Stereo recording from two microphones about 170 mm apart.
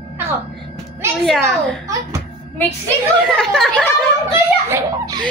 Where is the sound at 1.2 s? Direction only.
5° left (ahead or behind).